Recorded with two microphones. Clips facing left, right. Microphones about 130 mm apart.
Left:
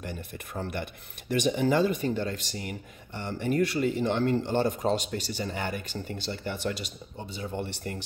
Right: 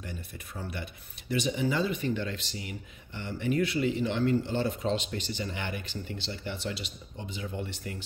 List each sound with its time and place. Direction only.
0.0 s speech: 55° left (ahead or behind); by 7.5 s 35° left (ahead or behind)
7.6 s speech: 45° left (ahead or behind)